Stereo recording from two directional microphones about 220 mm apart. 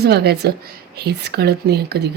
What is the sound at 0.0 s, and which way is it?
Speech, 45° right (ahead or behind).